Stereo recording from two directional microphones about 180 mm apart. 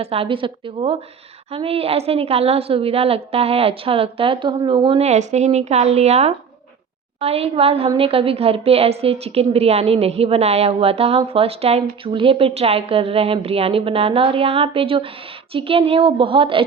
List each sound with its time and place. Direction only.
0.0 s a woman's voice: 30° right (ahead or behind)